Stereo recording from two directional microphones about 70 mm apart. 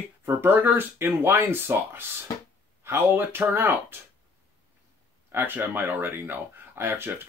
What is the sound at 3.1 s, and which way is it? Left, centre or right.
Speech, right.